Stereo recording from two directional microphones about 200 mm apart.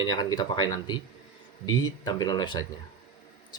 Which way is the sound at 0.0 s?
20° left (ahead or behind).